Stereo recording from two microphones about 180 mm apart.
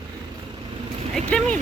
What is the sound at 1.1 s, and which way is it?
Speech, 5° left (ahead or behind).